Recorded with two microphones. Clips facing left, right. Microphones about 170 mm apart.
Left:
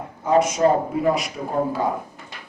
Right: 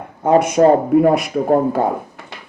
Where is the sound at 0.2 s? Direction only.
60° right (ahead or behind).